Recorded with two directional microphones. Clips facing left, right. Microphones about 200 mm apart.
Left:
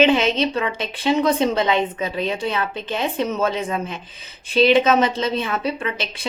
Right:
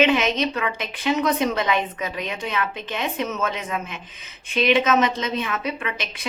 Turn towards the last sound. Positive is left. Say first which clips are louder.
# left 4 dB
turn(degrees=30)  # may be behind; listen again after turning